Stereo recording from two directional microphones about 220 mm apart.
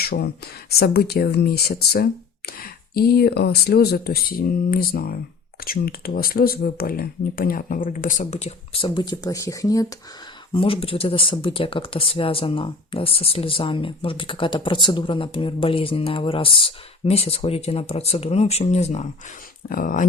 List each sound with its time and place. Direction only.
0.0 s speech: 45° left (ahead or behind)